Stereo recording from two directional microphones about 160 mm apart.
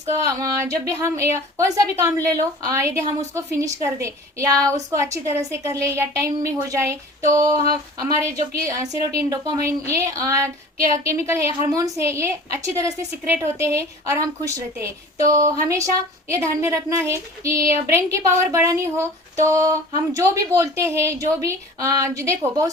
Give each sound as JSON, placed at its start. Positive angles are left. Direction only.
{"t": 0.3, "sound": "speech", "side_deg": -15}